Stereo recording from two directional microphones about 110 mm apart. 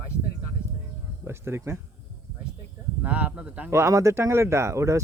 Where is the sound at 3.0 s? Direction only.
15° right (ahead or behind).